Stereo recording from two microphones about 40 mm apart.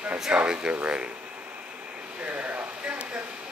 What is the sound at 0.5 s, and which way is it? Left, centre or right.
Speech, right.